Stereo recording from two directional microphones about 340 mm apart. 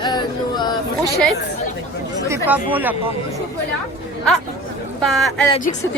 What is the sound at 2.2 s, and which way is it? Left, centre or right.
Speech, centre.